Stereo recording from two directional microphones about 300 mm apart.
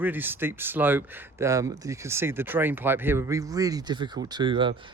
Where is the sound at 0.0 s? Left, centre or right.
Centre.